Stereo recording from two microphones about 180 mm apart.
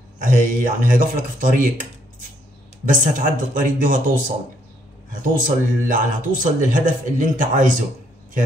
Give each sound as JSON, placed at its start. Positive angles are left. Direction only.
{"t": 0.2, "sound": "a man's voice", "side_deg": -50}
{"t": 5.1, "sound": "a man's voice", "side_deg": -50}